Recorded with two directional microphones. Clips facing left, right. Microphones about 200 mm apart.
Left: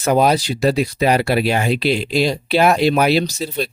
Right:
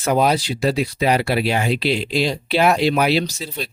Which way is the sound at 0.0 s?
45° left (ahead or behind).